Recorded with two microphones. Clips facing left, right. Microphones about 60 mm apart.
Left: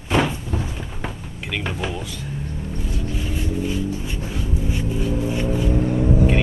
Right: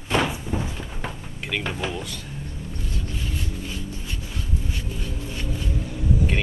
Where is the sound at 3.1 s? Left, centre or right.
Centre.